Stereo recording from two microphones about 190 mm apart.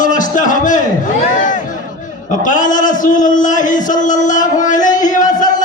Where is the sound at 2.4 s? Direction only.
40° left (ahead or behind).